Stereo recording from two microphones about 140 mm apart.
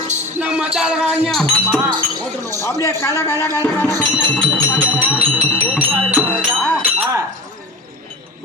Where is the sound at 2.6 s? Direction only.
20° left (ahead or behind).